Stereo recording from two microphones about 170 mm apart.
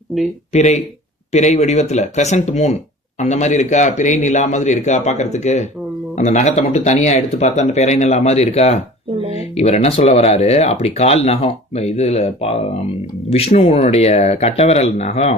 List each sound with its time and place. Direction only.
0.5 s speech: 40° left (ahead or behind)